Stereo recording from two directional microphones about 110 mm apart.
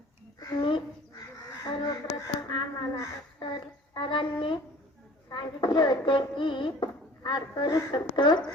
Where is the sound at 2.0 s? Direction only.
45° left (ahead or behind).